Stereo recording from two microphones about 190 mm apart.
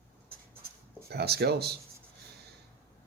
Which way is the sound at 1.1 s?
60° right (ahead or behind).